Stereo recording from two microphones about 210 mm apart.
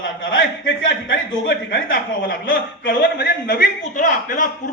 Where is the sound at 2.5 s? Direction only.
45° left (ahead or behind).